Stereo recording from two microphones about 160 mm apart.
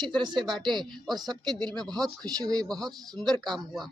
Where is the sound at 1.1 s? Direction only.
25° right (ahead or behind).